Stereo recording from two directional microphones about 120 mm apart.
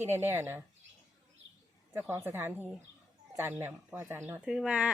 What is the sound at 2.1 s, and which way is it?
Speech, 20° right (ahead or behind).